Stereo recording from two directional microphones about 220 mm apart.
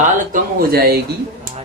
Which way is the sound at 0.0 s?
40° right (ahead or behind).